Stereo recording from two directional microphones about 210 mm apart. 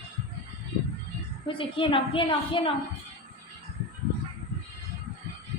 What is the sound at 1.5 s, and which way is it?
A woman's voice, 25° left (ahead or behind).